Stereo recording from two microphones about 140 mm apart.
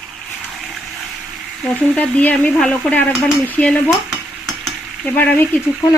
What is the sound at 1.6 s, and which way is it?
Speech, 10° left (ahead or behind).